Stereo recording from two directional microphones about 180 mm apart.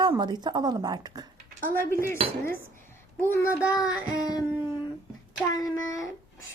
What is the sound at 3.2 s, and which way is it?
Speech, 15° left (ahead or behind).